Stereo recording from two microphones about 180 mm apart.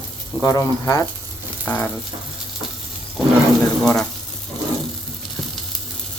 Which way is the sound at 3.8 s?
Centre (ahead or behind).